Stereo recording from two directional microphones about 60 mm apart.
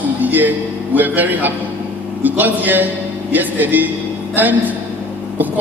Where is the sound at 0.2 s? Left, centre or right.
Right.